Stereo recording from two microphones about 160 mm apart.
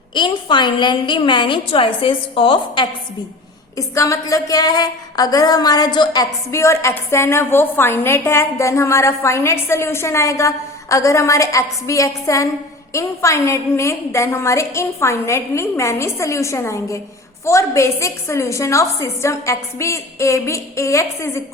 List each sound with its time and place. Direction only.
0.1 s a woman's voice: 30° left (ahead or behind)
3.8 s a woman's voice: 20° left (ahead or behind)